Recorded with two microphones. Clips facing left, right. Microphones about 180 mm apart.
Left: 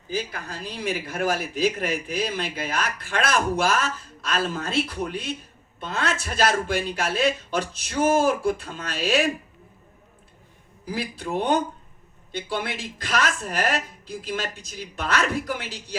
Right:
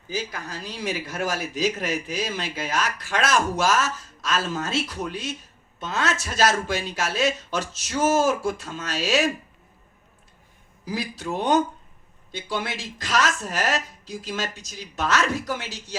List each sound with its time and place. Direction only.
0.2 s a man's voice: 55° left (ahead or behind)
11.2 s a man's voice: 55° left (ahead or behind)